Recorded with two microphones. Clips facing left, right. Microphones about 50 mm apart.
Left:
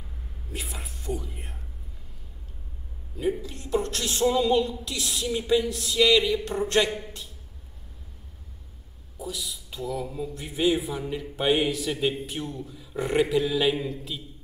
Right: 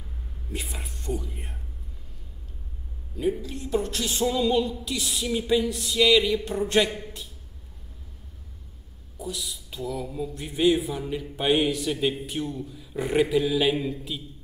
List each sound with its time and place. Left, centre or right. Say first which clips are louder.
0.5 s speech: right 1 dB; centre
3.2 s speech: right 1 dB; centre
9.2 s speech: right 1 dB; centre